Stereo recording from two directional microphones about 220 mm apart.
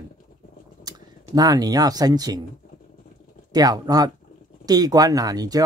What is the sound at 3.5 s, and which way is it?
Speech, 15° right (ahead or behind).